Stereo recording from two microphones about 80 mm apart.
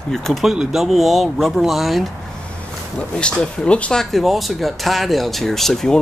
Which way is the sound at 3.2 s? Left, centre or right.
Centre.